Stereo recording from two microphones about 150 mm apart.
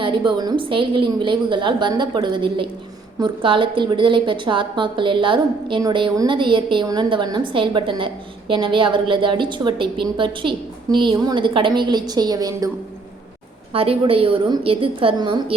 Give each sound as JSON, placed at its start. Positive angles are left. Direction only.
{"t": 0.0, "sound": "a woman's voice", "side_deg": -30}
{"t": 13.7, "sound": "a woman's voice", "side_deg": -40}